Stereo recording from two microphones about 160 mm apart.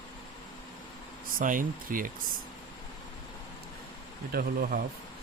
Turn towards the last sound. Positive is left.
turn(degrees=-65)  # may be behind; listen again after turning